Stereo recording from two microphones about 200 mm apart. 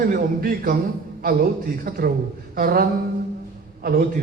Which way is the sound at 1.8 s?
45° right (ahead or behind).